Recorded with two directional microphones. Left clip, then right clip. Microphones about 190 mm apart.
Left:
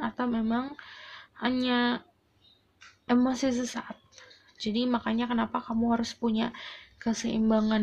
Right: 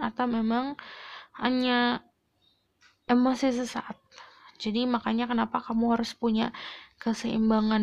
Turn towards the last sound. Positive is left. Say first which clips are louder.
# right 1 dB
turn(degrees=-35)  # may be behind; listen again after turning